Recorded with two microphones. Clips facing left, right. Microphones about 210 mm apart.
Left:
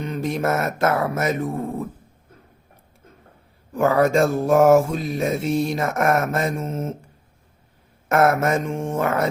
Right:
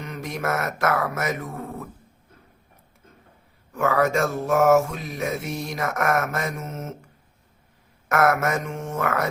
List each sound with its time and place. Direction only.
0.0 s mantra: 30° left (ahead or behind)
3.7 s mantra: 30° left (ahead or behind)
8.1 s mantra: 30° left (ahead or behind)